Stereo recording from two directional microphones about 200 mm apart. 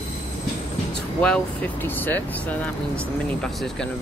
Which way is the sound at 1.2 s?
5° left (ahead or behind).